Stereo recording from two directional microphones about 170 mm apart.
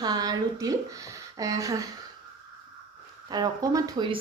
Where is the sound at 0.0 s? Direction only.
20° right (ahead or behind).